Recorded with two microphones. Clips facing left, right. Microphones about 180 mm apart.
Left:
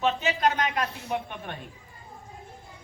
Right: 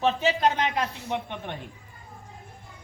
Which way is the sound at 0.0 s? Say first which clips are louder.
Right 2 dB; 30° right (ahead or behind).